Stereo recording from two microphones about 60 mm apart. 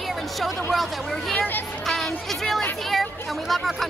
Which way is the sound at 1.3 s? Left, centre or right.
Left.